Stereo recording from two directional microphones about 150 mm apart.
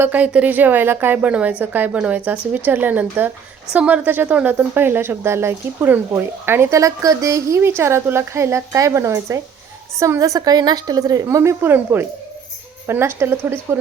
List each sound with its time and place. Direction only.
0.0 s a woman's voice: 10° right (ahead or behind)